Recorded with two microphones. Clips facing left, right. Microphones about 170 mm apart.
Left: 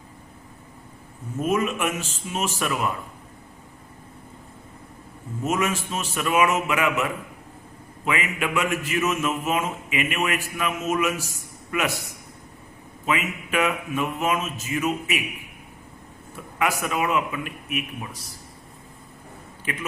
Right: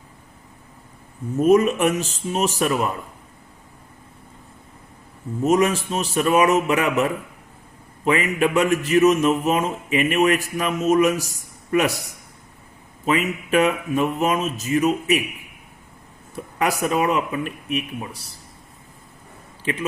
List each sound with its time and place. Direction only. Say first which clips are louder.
1.4 s a man's voice: right 8 dB; 40° right (ahead or behind)
5.4 s a man's voice: right 7 dB; 40° right (ahead or behind)
13.1 s a man's voice: right 5 dB; 35° right (ahead or behind)
16.3 s a man's voice: right 2 dB; 40° right (ahead or behind)
19.7 s speech: right 6 dB; 25° right (ahead or behind)